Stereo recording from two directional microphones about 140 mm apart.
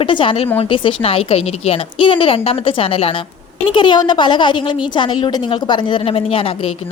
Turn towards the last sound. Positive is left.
turn(degrees=45)  # may be behind; listen again after turning